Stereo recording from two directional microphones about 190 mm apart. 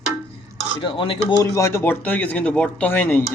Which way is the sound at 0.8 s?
25° left (ahead or behind).